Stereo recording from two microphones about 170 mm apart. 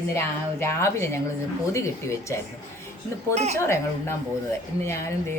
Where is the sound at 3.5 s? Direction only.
15° left (ahead or behind).